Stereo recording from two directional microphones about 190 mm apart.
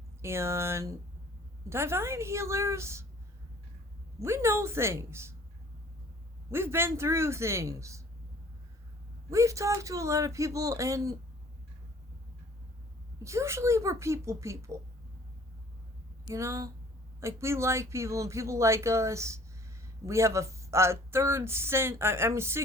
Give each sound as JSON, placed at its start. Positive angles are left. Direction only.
{"t": 0.2, "sound": "speech", "side_deg": -15}
{"t": 4.2, "sound": "speech", "side_deg": -15}
{"t": 6.5, "sound": "speech", "side_deg": -15}
{"t": 9.3, "sound": "speech", "side_deg": -15}
{"t": 13.1, "sound": "speech", "side_deg": -15}
{"t": 16.3, "sound": "speech", "side_deg": -15}